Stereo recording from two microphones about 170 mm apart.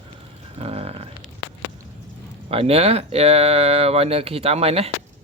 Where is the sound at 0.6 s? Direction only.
35° right (ahead or behind).